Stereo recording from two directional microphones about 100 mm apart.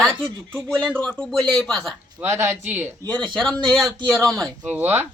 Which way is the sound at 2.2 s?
25° right (ahead or behind).